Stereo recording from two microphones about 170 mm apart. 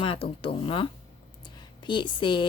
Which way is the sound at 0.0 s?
30° left (ahead or behind).